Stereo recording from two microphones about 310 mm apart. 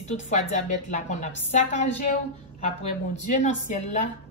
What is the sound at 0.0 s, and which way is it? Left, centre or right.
A woman's voice, left.